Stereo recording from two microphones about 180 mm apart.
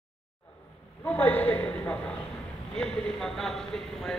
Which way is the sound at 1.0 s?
10° left (ahead or behind).